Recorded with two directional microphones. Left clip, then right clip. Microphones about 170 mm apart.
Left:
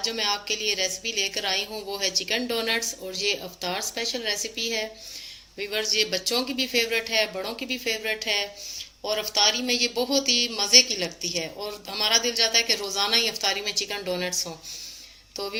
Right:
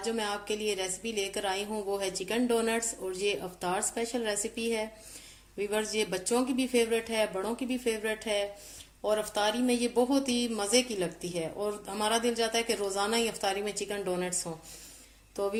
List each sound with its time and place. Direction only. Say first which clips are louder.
0.0 s a woman's voice: left 6 dB; 50° right (ahead or behind)
13.6 s a woman's voice: left 5 dB; 40° right (ahead or behind)